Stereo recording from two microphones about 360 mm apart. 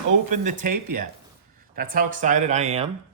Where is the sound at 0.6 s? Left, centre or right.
Right.